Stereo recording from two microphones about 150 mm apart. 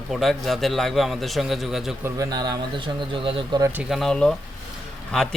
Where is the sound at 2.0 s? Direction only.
25° right (ahead or behind).